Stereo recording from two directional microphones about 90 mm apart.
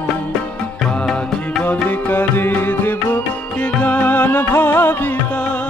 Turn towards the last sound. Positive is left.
turn(degrees=25)  # may be behind; listen again after turning